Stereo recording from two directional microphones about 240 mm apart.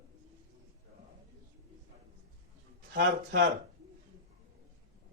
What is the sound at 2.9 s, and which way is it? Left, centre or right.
Speech, right.